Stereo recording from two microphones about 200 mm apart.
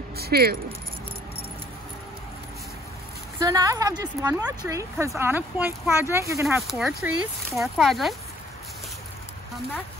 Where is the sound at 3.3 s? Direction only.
15° right (ahead or behind).